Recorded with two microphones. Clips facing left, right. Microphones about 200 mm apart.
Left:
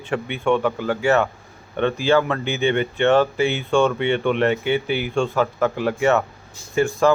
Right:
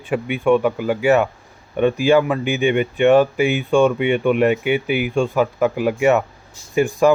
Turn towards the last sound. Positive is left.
turn(degrees=-15)  # may be behind; listen again after turning